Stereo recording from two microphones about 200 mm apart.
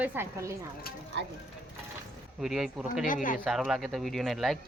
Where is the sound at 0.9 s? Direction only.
50° left (ahead or behind).